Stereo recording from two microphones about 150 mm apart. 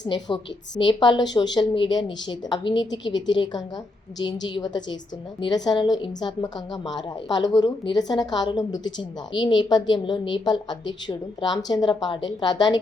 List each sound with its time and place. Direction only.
0.0 s a woman's voice: 30° left (ahead or behind)